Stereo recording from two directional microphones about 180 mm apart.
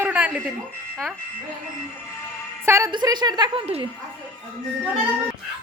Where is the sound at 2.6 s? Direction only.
15° right (ahead or behind); by 3.9 s 30° right (ahead or behind).